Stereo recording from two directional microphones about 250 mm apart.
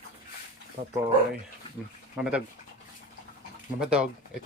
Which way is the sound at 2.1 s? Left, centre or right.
Centre.